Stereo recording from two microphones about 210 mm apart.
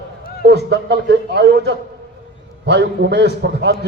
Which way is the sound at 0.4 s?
55° right (ahead or behind).